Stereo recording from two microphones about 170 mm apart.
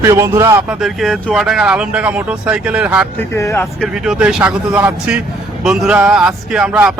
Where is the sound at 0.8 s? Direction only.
Centre (ahead or behind).